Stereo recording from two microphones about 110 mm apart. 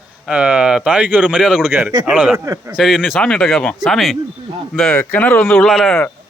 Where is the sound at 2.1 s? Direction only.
5° right (ahead or behind).